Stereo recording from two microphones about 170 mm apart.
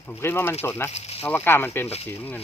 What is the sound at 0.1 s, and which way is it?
Speech, 15° left (ahead or behind).